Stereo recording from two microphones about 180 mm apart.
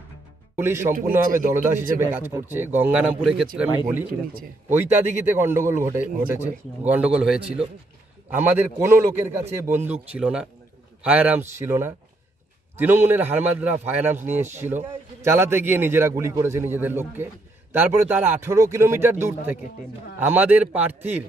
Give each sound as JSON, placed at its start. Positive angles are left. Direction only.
{"t": 0.6, "sound": "a man's voice", "side_deg": -15}
{"t": 1.2, "sound": "a man's voice", "side_deg": -50}
{"t": 1.5, "sound": "a man's voice", "side_deg": -15}
{"t": 4.1, "sound": "speech", "side_deg": -55}
{"t": 4.6, "sound": "a man's voice", "side_deg": -10}